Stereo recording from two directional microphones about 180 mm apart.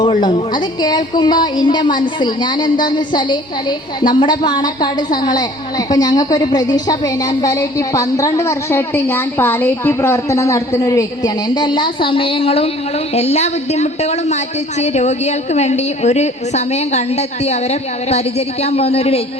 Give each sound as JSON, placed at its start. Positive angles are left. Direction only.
{"t": 0.2, "sound": "a woman's voice", "side_deg": 25}